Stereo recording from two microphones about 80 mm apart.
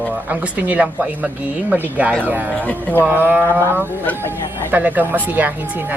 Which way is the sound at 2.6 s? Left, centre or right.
Centre.